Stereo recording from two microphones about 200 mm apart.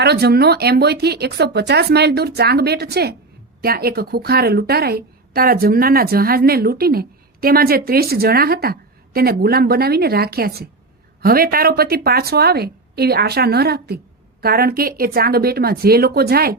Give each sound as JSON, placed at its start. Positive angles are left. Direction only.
{"t": 0.0, "sound": "a woman's voice", "side_deg": -55}